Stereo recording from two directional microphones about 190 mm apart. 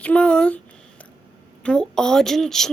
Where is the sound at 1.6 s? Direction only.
5° left (ahead or behind).